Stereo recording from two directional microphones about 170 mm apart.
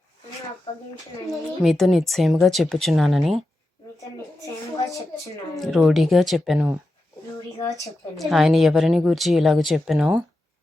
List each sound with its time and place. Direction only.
1.3 s a woman's voice: centre (ahead or behind)
4.0 s a woman's voice: 20° left (ahead or behind)
5.5 s a woman's voice: centre (ahead or behind)
8.1 s a woman's voice: centre (ahead or behind)